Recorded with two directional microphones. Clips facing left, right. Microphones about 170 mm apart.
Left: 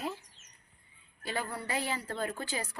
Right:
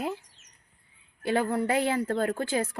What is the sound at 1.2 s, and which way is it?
Speech, 55° right (ahead or behind).